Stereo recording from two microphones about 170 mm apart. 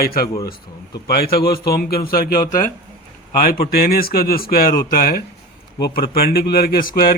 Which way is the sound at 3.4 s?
60° left (ahead or behind).